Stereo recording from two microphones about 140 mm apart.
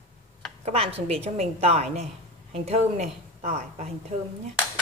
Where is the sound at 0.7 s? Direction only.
45° right (ahead or behind).